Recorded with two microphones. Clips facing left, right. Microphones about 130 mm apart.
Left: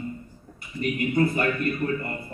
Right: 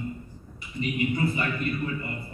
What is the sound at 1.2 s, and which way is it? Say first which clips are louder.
Speech: left 5 dB; 55° left (ahead or behind).